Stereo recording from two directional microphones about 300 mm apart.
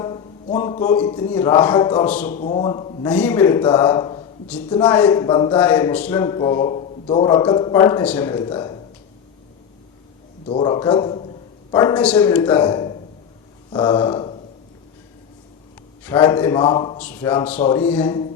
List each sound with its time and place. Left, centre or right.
0.0 s a sound: centre
0.6 s speech: centre
2.3 s speech: left
3.1 s speech: centre
4.4 s a man's voice: centre
10.4 s speech: centre
13.7 s a sound: centre
16.0 s a man's voice: centre